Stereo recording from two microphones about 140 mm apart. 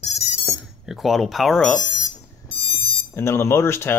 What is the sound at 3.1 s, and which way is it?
Speech, 20° left (ahead or behind).